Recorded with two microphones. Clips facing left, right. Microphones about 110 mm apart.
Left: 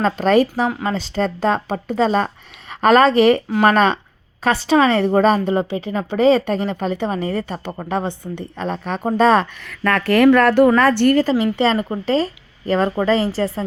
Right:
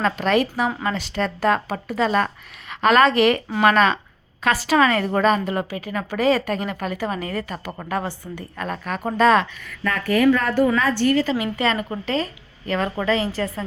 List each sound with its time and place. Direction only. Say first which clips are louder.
0.0 s a woman's voice: left 5 dB; 35° left (ahead or behind)
9.6 s speech: left 5 dB; 85° left; by 11.1 s 65° left (ahead or behind)
11.1 s speech: left 5 dB; 40° left (ahead or behind)